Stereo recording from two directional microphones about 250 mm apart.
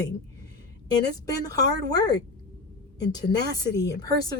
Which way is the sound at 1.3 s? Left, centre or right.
Centre.